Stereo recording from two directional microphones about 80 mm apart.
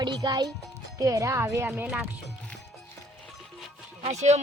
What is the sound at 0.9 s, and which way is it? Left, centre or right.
Speech, right.